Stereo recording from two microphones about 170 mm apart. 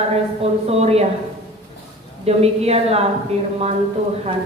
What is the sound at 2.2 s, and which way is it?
Speech, 35° right (ahead or behind).